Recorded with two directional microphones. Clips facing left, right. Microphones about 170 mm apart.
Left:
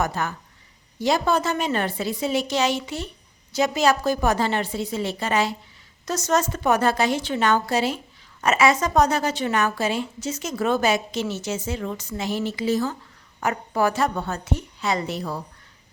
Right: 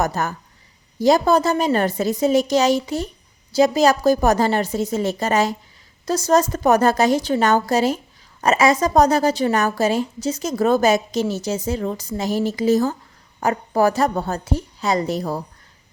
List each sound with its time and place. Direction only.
0.0 s a woman's voice: 40° right (ahead or behind)